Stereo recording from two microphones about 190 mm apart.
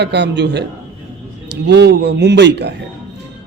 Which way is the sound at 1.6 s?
65° right (ahead or behind).